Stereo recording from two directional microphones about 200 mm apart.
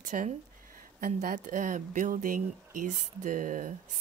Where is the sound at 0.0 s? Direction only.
40° right (ahead or behind).